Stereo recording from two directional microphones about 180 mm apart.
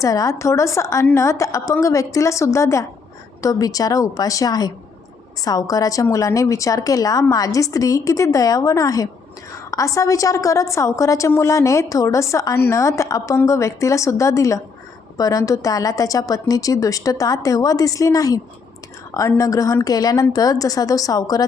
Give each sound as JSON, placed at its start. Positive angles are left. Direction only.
{"t": 0.0, "sound": "a woman's voice", "side_deg": 20}